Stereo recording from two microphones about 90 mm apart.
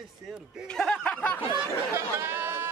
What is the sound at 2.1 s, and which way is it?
Speech, 25° right (ahead or behind).